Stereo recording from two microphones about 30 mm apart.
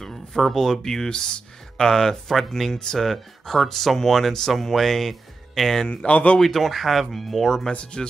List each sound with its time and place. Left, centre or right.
0.0 s speech: centre
2.2 s speech: centre
6.0 s a man's voice: left
6.4 s speech: centre
7.7 s speech: left